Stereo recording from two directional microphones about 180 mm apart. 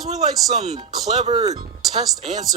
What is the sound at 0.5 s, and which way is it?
Speech, 35° right (ahead or behind).